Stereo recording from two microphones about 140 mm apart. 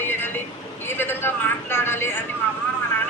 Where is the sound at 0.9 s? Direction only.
15° left (ahead or behind).